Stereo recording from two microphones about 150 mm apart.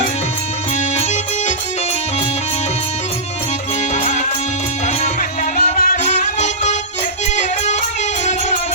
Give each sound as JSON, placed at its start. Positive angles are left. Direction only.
{"t": 0.9, "sound": "music", "side_deg": 50}
{"t": 3.9, "sound": "music", "side_deg": 50}
{"t": 5.7, "sound": "music", "side_deg": 75}
{"t": 6.0, "sound": "music", "side_deg": 50}